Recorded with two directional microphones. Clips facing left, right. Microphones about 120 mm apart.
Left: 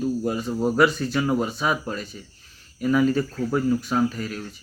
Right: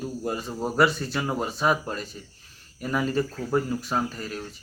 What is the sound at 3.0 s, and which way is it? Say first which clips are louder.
Speech: left 3 dB; 40° right (ahead or behind).